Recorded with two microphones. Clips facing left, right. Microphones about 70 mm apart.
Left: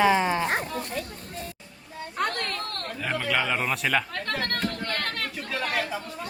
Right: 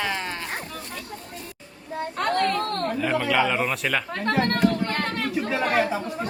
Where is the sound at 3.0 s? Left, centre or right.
Centre.